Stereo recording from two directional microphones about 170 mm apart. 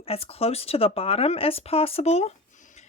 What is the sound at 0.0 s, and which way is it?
Speech, 35° left (ahead or behind).